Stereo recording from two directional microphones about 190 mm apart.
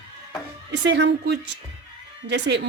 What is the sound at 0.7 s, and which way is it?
Speech, 65° right (ahead or behind).